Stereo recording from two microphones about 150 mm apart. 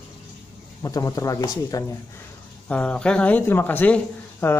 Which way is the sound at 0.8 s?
25° left (ahead or behind).